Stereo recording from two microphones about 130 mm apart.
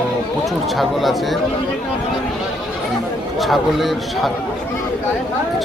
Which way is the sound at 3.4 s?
Centre (ahead or behind).